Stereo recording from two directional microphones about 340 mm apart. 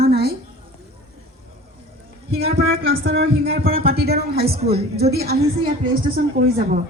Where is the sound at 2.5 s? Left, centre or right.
Right.